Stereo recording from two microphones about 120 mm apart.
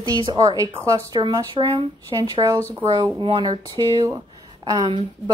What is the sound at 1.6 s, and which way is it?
A woman's voice, 45° right (ahead or behind).